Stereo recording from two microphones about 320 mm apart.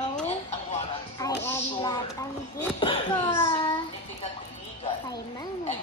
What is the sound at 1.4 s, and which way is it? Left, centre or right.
A child's voice, centre.